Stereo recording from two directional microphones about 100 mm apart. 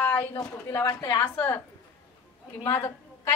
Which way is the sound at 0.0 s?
20° left (ahead or behind).